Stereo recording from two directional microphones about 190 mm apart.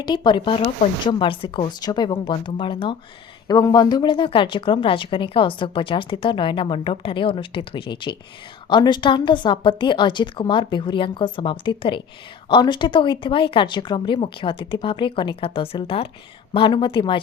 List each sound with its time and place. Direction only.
0.0 s a woman's voice: 25° left (ahead or behind)